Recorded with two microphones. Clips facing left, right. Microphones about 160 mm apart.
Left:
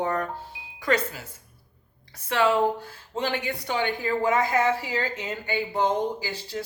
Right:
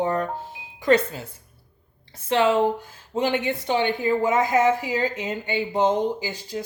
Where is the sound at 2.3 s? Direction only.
20° right (ahead or behind).